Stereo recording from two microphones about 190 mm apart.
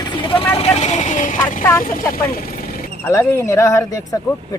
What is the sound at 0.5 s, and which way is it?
Vehicle, 35° left (ahead or behind).